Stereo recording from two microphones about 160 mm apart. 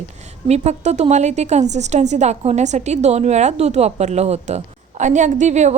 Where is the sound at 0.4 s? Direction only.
45° right (ahead or behind).